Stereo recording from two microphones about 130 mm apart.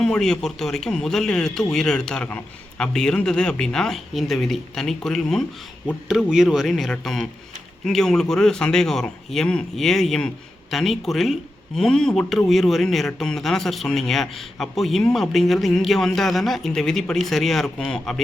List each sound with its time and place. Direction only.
0.0 s speech: 5° left (ahead or behind)